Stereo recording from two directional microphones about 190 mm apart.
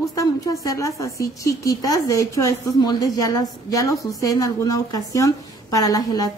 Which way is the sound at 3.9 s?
Centre (ahead or behind).